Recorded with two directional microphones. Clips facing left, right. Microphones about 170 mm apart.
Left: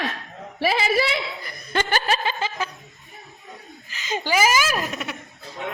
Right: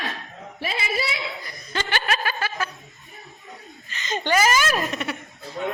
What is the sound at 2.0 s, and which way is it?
Chuckle, 25° left (ahead or behind).